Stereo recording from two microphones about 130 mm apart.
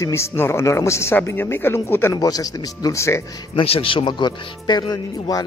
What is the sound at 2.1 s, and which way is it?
Speech, 30° left (ahead or behind).